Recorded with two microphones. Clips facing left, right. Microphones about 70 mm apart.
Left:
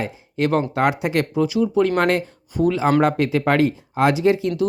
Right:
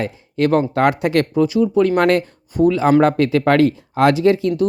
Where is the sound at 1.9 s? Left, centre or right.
Right.